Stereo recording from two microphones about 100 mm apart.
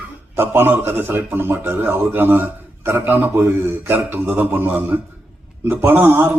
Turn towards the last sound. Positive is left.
turn(degrees=-20)  # may be behind; listen again after turning